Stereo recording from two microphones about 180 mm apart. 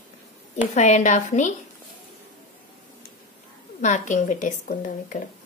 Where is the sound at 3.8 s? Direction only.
45° left (ahead or behind).